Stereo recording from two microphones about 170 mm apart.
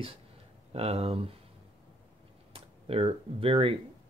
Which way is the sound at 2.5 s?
35° right (ahead or behind).